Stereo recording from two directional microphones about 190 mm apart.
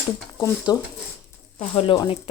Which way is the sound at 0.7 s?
20° left (ahead or behind).